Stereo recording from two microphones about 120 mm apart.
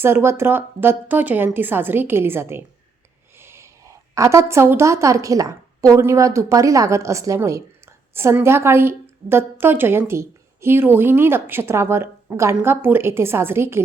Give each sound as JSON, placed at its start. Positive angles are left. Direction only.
{"t": 0.0, "sound": "a woman's voice", "side_deg": -20}